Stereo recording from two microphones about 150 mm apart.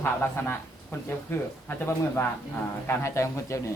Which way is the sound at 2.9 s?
20° left (ahead or behind).